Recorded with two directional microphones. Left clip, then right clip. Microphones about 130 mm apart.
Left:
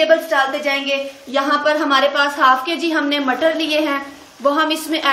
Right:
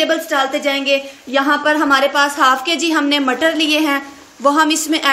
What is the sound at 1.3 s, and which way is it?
A woman's voice, 85° right.